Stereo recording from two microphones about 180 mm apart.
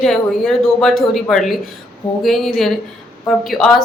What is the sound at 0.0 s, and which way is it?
Speech, centre (ahead or behind).